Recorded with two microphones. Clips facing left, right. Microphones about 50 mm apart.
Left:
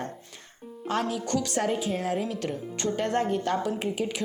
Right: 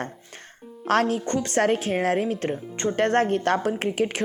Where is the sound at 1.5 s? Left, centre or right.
Right.